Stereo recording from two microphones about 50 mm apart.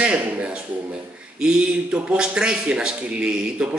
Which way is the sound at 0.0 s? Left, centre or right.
Right.